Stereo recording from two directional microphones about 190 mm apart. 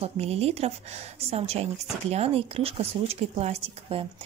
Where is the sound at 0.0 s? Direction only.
30° right (ahead or behind).